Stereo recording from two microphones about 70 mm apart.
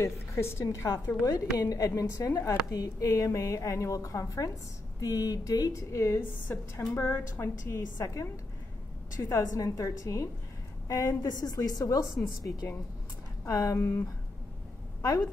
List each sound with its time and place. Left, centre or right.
0.0 s a woman's voice: left
1.2 s speech: left
5.0 s speech: left
6.5 s a woman's voice: left
9.5 s a woman's voice: left
13.5 s a woman's voice: left
13.7 s a woman's voice: left
15.0 s speech: left